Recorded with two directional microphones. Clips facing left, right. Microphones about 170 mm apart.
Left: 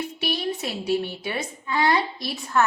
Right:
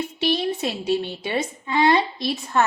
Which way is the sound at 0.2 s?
25° right (ahead or behind).